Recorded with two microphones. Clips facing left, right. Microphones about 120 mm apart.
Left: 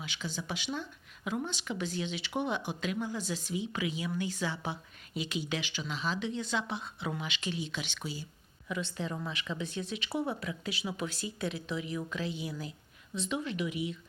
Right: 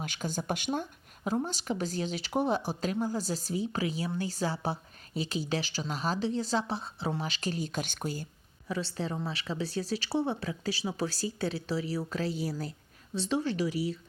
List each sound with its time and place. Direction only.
0.0 s a woman's voice: 45° right (ahead or behind)
8.6 s a woman's voice: 35° right (ahead or behind)